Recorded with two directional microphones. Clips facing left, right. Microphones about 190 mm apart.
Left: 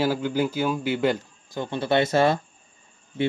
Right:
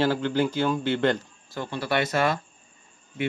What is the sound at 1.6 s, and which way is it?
Speech, 25° left (ahead or behind).